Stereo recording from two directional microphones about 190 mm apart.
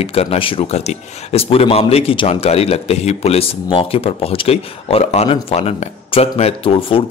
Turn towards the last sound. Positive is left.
turn(degrees=30)  # may be behind; listen again after turning